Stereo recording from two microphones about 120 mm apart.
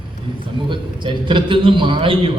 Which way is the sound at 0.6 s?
45° right (ahead or behind).